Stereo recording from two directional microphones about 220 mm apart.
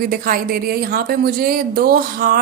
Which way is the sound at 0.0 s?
40° right (ahead or behind).